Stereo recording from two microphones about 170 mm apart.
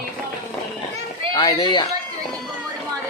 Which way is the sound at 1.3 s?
25° left (ahead or behind).